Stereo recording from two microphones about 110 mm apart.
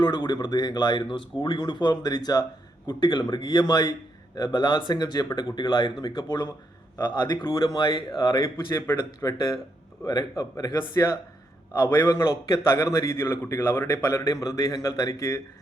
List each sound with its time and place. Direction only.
0.0 s a man's voice: 40° left (ahead or behind)